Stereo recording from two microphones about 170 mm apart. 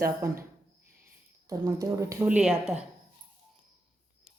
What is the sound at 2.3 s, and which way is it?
Speech, 5° right (ahead or behind).